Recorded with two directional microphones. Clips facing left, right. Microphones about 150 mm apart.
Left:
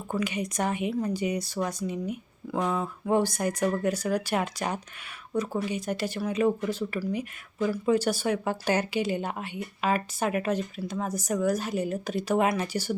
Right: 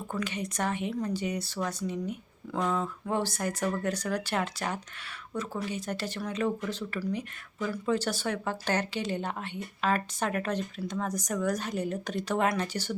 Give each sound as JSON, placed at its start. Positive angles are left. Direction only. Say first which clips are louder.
{"t": 0.1, "sound": "speech", "louder": "left 5 dB", "side_deg": 10}